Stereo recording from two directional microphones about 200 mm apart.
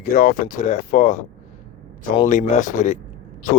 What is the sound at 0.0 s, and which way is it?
Speech, 45° left (ahead or behind).